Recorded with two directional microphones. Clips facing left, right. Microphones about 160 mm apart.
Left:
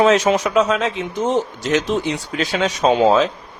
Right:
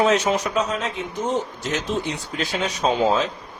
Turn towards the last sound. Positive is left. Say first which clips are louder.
# left 5 dB
turn(degrees=90)